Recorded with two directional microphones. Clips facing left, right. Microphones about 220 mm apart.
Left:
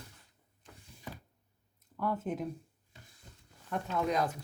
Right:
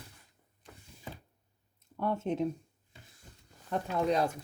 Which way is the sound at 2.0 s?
25° right (ahead or behind).